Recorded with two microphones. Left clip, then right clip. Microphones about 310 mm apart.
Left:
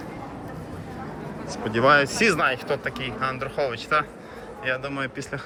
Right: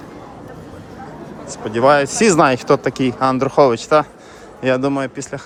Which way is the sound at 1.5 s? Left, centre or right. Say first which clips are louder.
Right 5 dB; centre.